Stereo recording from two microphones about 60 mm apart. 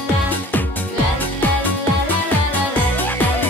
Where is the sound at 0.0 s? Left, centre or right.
Left.